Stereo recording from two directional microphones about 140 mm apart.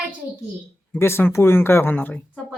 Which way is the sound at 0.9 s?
15° left (ahead or behind).